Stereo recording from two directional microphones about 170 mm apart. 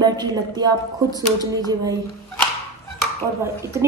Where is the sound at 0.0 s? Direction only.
25° right (ahead or behind).